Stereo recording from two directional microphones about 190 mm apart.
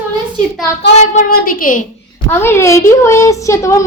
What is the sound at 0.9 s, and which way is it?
Child singing, 35° left (ahead or behind).